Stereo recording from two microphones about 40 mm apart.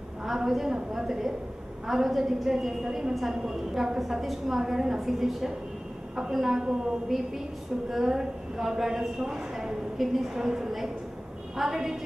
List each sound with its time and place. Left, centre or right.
0.2 s a woman's voice: centre